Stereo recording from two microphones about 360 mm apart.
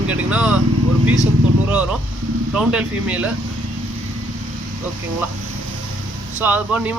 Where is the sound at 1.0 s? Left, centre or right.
Right.